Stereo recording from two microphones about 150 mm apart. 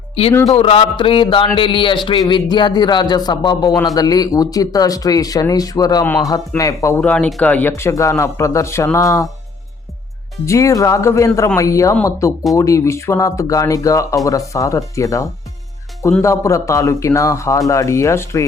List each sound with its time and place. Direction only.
0.5 s a sound: 40° left (ahead or behind)
1.5 s speech: 35° left (ahead or behind)
7.0 s speech: 10° left (ahead or behind)
10.4 s speech: 20° left (ahead or behind)